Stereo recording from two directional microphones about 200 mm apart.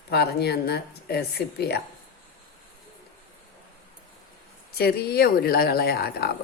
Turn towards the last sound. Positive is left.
turn(degrees=50)  # may be behind; listen again after turning